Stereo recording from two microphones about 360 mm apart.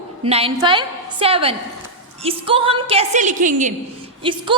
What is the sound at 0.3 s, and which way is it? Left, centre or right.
A woman's voice, centre.